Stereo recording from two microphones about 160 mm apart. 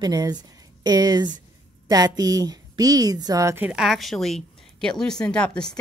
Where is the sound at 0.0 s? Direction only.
25° right (ahead or behind).